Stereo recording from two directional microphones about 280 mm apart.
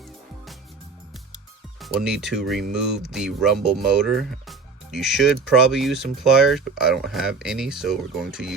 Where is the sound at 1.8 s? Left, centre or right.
Centre.